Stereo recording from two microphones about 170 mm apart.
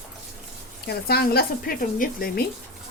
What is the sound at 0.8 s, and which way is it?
Speech, 65° left (ahead or behind).